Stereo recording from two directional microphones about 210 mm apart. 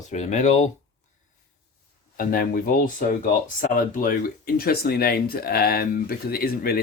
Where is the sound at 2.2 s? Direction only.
45° left (ahead or behind).